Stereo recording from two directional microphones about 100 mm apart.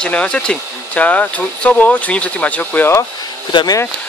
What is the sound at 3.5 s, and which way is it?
Speech, 50° left (ahead or behind).